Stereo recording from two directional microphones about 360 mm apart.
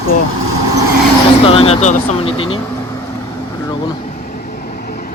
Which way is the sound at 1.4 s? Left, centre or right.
Centre.